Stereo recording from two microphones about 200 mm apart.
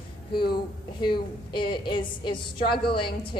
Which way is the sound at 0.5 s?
25° left (ahead or behind).